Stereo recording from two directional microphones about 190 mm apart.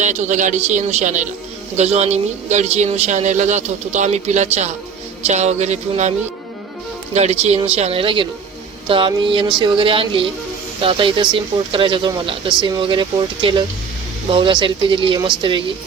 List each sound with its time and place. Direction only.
0.0 s speech: 40° right (ahead or behind)